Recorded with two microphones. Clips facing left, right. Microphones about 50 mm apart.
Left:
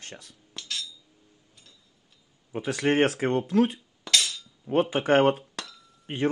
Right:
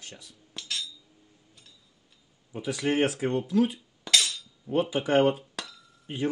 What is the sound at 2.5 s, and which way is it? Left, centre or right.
Speech, left.